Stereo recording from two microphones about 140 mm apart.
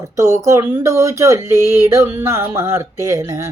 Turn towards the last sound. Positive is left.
turn(degrees=-20)  # may be behind; listen again after turning